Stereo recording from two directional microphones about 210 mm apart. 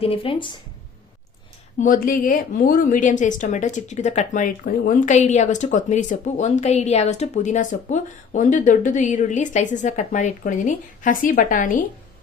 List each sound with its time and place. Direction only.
0.0 s speech: 25° left (ahead or behind)
1.8 s speech: 40° left (ahead or behind)